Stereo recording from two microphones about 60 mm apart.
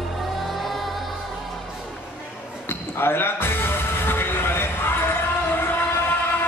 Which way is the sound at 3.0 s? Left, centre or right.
Left.